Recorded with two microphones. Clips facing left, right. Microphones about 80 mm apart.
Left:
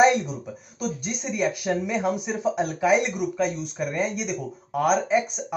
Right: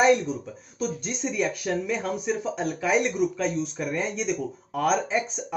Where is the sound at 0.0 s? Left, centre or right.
Centre.